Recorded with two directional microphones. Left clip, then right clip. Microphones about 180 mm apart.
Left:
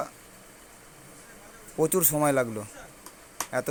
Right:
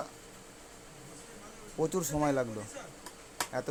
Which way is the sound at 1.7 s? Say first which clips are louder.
Left 7 dB; 25° left (ahead or behind).